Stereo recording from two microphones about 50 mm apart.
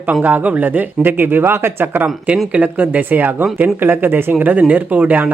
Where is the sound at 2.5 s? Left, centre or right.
Right.